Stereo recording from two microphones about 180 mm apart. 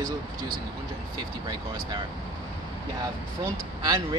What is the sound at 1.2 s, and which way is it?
Speech, 25° right (ahead or behind).